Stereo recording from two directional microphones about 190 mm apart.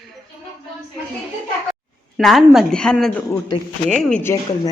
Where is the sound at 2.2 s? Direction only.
Centre (ahead or behind).